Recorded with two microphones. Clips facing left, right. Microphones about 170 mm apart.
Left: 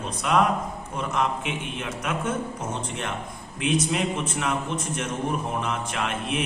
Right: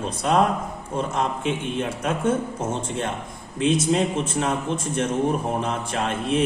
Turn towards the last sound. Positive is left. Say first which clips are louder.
# right 5 dB
turn(degrees=-30)  # may be behind; listen again after turning